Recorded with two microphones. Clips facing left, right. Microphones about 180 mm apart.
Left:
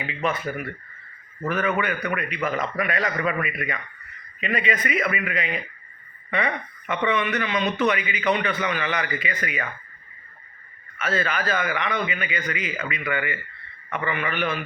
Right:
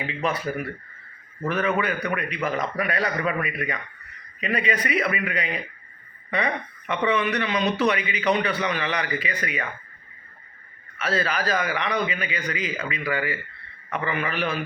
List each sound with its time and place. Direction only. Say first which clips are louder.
0.1 s speech: left 1 dB; 35° right (ahead or behind)
10.9 s speech: even; 35° right (ahead or behind)